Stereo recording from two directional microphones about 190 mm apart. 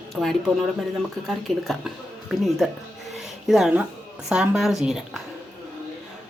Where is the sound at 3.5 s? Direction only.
Centre (ahead or behind).